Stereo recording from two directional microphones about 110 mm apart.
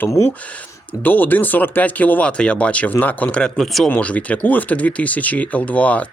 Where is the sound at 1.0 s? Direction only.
15° left (ahead or behind).